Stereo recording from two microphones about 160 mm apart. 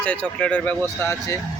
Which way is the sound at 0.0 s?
10° left (ahead or behind).